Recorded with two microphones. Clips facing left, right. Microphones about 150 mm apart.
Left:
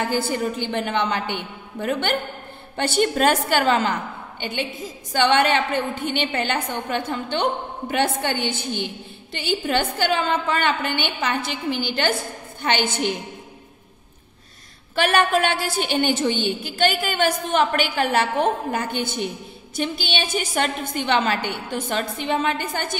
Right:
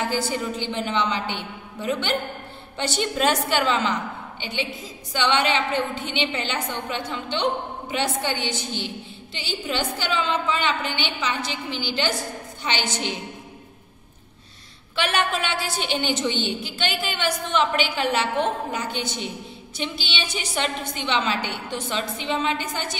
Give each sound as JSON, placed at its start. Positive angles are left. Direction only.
{"t": 0.0, "sound": "a woman's voice", "side_deg": 55}
{"t": 15.0, "sound": "a woman's voice", "side_deg": 50}